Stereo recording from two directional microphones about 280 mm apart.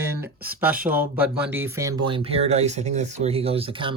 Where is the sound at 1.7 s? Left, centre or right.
Centre.